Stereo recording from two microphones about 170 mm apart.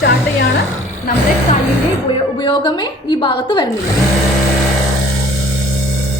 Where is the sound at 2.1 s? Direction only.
25° left (ahead or behind).